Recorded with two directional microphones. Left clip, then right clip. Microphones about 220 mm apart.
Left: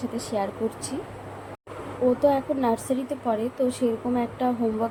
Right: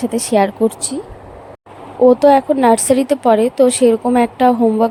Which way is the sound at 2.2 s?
45° right (ahead or behind).